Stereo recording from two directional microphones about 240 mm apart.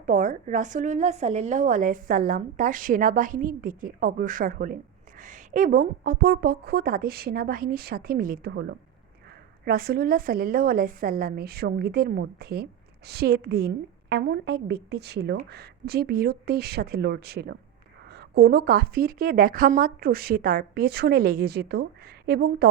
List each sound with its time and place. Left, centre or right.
0.0 s a woman's voice: right
9.6 s a woman's voice: right